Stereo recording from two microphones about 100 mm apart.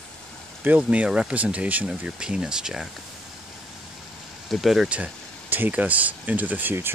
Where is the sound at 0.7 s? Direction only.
15° right (ahead or behind).